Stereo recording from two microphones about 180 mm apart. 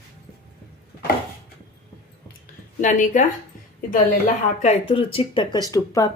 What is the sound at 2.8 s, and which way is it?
Speech, 45° left (ahead or behind).